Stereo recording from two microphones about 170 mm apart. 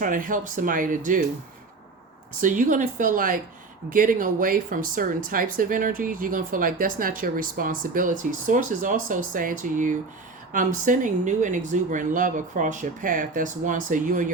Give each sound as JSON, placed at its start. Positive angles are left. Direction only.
{"t": 0.0, "sound": "speech", "side_deg": -50}
{"t": 2.4, "sound": "speech", "side_deg": -50}